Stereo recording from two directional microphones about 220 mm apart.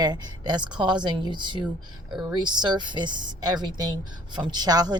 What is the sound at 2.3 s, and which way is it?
A woman's voice, 20° right (ahead or behind).